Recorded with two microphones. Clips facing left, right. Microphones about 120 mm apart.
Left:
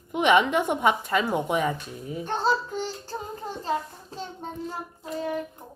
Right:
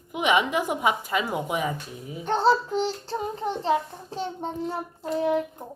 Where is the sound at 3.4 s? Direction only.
70° right (ahead or behind).